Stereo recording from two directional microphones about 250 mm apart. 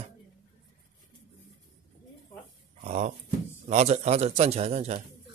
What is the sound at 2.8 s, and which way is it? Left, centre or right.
A man's voice, right.